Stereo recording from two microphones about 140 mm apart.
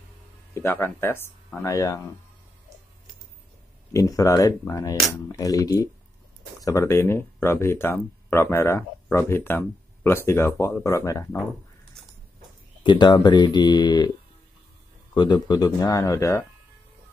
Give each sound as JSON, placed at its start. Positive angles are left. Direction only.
{"t": 0.6, "sound": "speech", "side_deg": 15}
{"t": 3.9, "sound": "speech", "side_deg": 25}
{"t": 12.8, "sound": "speech", "side_deg": 35}
{"t": 15.1, "sound": "speech", "side_deg": 30}